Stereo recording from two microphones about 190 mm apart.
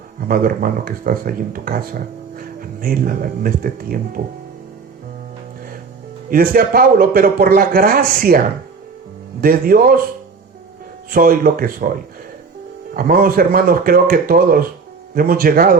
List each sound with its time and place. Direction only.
0.2 s speech: 50° right (ahead or behind)
6.3 s speech: 50° right (ahead or behind)
11.1 s speech: 50° right (ahead or behind)
12.9 s speech: 50° right (ahead or behind)